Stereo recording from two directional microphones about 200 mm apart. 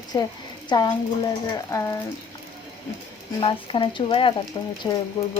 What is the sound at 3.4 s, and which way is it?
Speech, 25° left (ahead or behind).